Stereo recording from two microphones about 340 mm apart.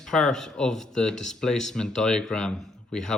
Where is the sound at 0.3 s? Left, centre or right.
Centre.